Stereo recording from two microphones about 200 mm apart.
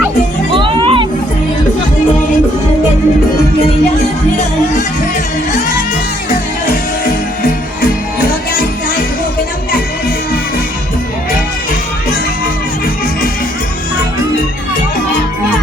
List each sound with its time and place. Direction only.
0.5 s music: 25° right (ahead or behind)
7.0 s music: 45° left (ahead or behind)